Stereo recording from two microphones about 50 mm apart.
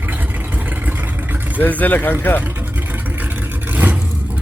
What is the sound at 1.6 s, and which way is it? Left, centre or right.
Speech, left.